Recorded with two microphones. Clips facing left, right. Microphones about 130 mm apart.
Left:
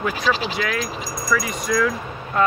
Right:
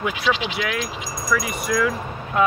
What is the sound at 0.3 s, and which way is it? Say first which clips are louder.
Speech: even; 40° left (ahead or behind).